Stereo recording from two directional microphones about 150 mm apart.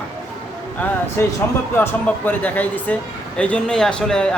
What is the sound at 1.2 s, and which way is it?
Speech, 15° left (ahead or behind).